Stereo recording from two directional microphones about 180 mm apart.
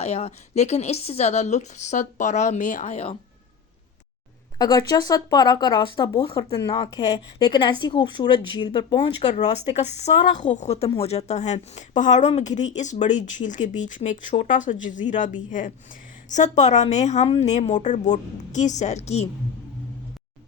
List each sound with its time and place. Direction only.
0.0 s a woman's voice: 40° left (ahead or behind)
4.5 s speech: 20° left (ahead or behind)
9.5 s a woman's voice: 35° left (ahead or behind)